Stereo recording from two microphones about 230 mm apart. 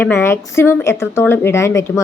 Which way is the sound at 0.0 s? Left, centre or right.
Centre.